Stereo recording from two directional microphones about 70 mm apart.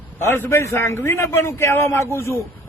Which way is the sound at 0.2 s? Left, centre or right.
Left.